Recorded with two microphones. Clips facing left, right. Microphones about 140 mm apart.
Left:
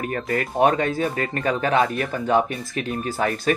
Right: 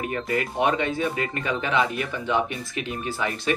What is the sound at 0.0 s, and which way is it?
Speech, 45° left (ahead or behind).